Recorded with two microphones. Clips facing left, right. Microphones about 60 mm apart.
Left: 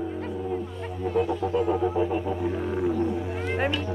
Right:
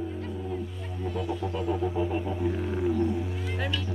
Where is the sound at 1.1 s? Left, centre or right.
Left.